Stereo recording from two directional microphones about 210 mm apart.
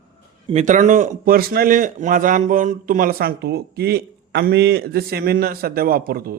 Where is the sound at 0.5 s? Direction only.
35° right (ahead or behind).